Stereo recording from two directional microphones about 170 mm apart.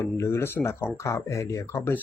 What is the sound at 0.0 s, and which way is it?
Speech, 15° left (ahead or behind).